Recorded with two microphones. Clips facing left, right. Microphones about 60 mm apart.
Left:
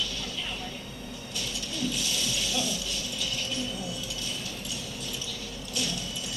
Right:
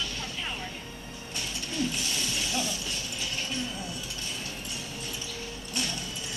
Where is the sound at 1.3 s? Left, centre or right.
Right.